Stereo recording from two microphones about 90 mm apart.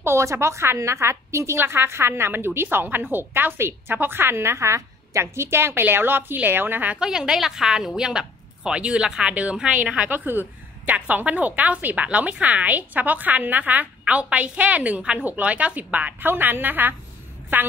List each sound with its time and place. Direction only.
0.0 s a woman's voice: 30° right (ahead or behind)
7.0 s a woman's voice: 5° right (ahead or behind)
10.0 s a woman's voice: 20° right (ahead or behind)